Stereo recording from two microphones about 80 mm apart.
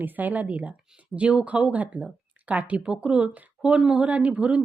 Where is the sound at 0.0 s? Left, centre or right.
Right.